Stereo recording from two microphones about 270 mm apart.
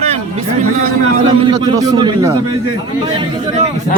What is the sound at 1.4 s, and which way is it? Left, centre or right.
A man's voice, centre.